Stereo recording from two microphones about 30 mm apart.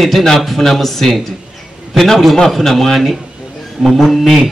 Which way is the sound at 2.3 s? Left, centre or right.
Centre.